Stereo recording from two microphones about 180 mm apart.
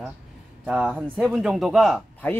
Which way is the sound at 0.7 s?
10° right (ahead or behind).